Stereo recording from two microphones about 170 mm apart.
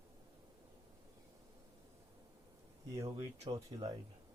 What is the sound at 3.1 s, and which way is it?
Speech, 25° right (ahead or behind).